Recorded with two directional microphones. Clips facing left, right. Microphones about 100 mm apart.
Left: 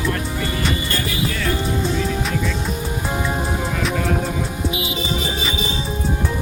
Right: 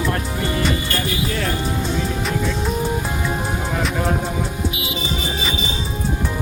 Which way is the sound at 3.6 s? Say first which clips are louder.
Even; centre (ahead or behind).